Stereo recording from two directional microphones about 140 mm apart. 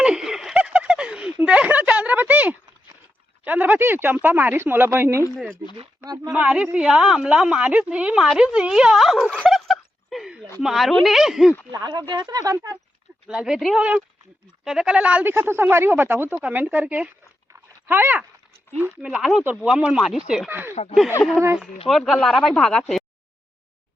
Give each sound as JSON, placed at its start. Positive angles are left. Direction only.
{"t": 0.0, "sound": "a sound", "side_deg": -5}
{"t": 3.4, "sound": "speech", "side_deg": -10}
{"t": 6.3, "sound": "a woman's voice", "side_deg": -10}
{"t": 11.7, "sound": "speech", "side_deg": -30}
{"t": 13.2, "sound": "speech", "side_deg": -5}
{"t": 17.5, "sound": "a sound", "side_deg": -15}
{"t": 19.0, "sound": "speech", "side_deg": -5}
{"t": 20.8, "sound": "speech", "side_deg": 50}
{"t": 21.4, "sound": "speech", "side_deg": -10}
{"t": 21.8, "sound": "speech", "side_deg": 0}